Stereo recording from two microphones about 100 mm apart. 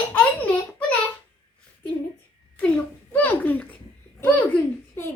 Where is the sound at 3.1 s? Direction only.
20° left (ahead or behind).